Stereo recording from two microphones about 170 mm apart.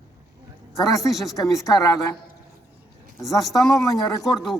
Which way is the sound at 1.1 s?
Centre (ahead or behind).